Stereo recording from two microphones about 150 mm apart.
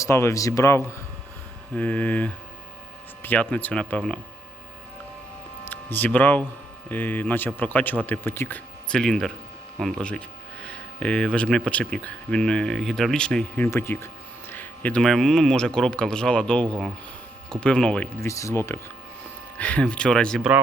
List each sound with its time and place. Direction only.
0.0 s speech: 20° left (ahead or behind)
5.6 s speech: 10° left (ahead or behind)
18.3 s speech: 20° left (ahead or behind); by 20.4 s 5° left (ahead or behind)